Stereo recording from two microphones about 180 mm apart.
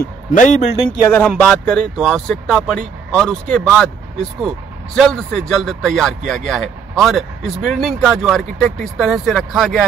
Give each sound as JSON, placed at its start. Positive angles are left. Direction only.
{"t": 0.0, "sound": "speech", "side_deg": 50}
{"t": 1.0, "sound": "speech", "side_deg": 10}
{"t": 2.0, "sound": "speech", "side_deg": 0}